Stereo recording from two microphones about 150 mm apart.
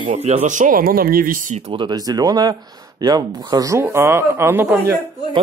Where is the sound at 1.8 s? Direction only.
25° right (ahead or behind).